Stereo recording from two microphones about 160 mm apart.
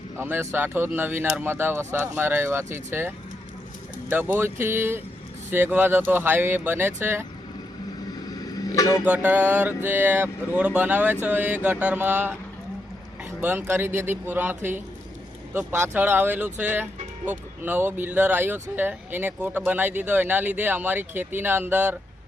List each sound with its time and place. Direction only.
0.2 s speech: 15° right (ahead or behind)
4.1 s speech: 10° right (ahead or behind)
8.3 s a sound: 25° left (ahead or behind)
9.0 s speech: 10° right (ahead or behind)
13.4 s speech: 15° right (ahead or behind)